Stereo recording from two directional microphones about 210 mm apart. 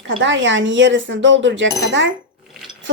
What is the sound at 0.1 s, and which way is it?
Speech, 60° right (ahead or behind).